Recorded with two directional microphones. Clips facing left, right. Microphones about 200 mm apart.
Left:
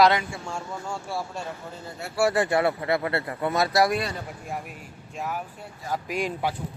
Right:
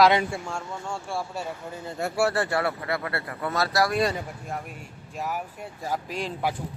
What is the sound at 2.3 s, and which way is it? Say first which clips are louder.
Speech: left 3 dB; 15° left (ahead or behind).